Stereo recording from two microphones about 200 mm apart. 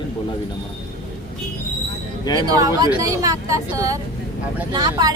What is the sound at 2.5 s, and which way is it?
Speech, 20° right (ahead or behind).